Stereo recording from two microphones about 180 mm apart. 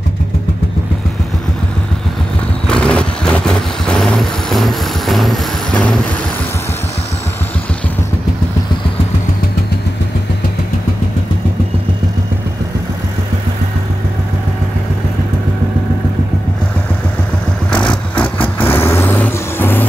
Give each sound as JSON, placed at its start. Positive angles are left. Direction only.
{"t": 2.6, "sound": "vehicle", "side_deg": 5}
{"t": 17.6, "sound": "vehicle", "side_deg": 5}